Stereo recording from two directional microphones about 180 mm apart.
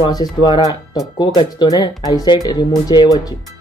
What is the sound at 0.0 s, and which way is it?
Speech, 20° left (ahead or behind).